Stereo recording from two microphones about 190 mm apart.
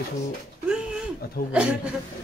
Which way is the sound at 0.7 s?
5° right (ahead or behind).